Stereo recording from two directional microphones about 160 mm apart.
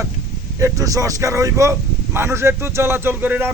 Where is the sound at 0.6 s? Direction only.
20° right (ahead or behind).